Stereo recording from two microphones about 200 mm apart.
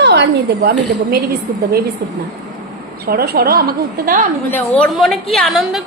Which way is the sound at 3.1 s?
50° right (ahead or behind).